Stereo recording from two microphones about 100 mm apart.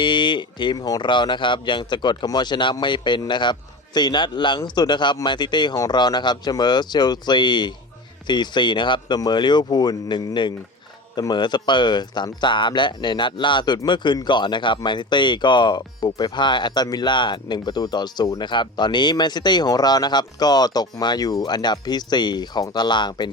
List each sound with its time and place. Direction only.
0.0 s speech: 50° left (ahead or behind)